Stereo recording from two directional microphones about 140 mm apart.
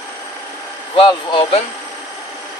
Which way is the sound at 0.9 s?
35° left (ahead or behind).